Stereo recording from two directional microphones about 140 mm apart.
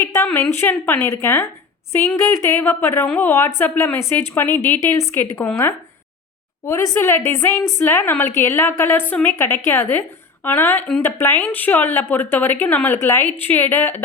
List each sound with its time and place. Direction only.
0.0 s a sound: 20° left (ahead or behind)
0.4 s a woman's voice: 15° left (ahead or behind)
6.7 s a woman's voice: 20° left (ahead or behind)